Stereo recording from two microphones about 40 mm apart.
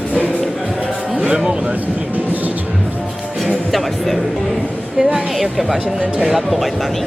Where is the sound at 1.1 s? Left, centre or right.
Right.